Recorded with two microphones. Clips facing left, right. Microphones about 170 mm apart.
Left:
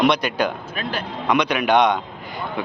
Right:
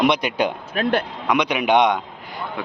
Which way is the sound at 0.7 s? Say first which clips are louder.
Right 7 dB; 65° right (ahead or behind).